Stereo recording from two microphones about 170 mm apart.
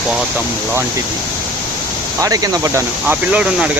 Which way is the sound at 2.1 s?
20° right (ahead or behind).